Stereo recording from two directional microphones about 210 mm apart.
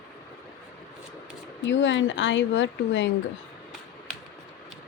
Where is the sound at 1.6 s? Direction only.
60° left (ahead or behind).